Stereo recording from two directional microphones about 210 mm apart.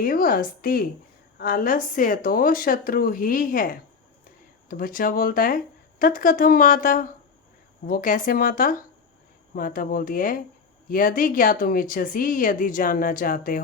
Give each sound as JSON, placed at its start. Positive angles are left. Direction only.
{"t": 0.0, "sound": "a woman's voice", "side_deg": 40}